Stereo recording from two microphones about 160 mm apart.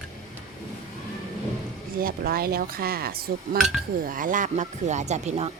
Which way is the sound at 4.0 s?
60° right (ahead or behind).